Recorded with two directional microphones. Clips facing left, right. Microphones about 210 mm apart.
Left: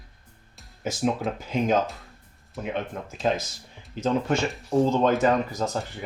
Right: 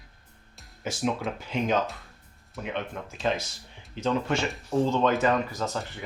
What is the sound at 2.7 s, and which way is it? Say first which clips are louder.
Speech: left 2 dB; 40° left (ahead or behind).